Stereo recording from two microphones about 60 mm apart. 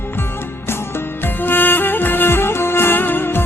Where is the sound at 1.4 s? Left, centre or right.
Left.